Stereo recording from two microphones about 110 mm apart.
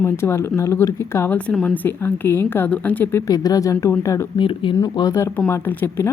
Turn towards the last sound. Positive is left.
turn(degrees=20)  # may be behind; listen again after turning